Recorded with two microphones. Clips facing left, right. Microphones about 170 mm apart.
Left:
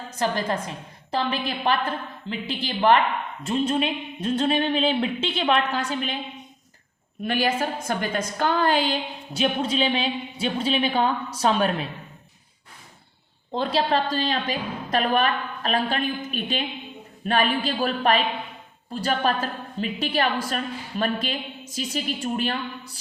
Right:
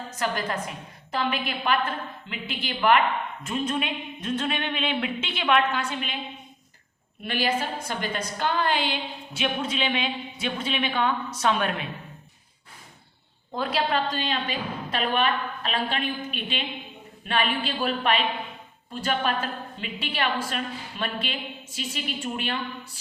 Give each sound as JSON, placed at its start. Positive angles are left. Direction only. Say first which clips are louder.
{"t": 0.2, "sound": "a woman's voice", "louder": "left 3 dB", "side_deg": 30}
{"t": 7.3, "sound": "a woman's voice", "louder": "left 3 dB", "side_deg": 45}
{"t": 13.5, "sound": "a woman's voice", "louder": "left 3 dB", "side_deg": 30}